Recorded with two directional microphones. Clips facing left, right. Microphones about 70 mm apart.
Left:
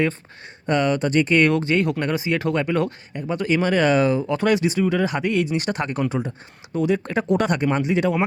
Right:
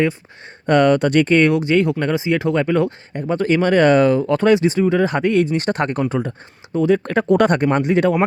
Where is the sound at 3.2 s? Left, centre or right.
Right.